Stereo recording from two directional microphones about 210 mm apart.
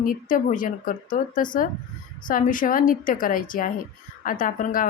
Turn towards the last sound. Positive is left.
turn(degrees=40)  # may be behind; listen again after turning